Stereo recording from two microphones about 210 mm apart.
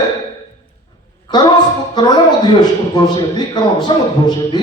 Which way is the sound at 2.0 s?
20° left (ahead or behind).